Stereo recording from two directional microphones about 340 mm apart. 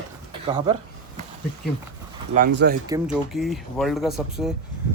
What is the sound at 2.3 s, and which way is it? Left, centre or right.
Speech, right.